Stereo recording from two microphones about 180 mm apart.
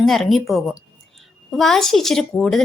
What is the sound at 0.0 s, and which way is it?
A woman's voice, centre (ahead or behind).